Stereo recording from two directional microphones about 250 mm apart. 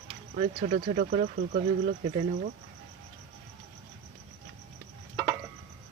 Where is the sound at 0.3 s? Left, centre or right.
Right.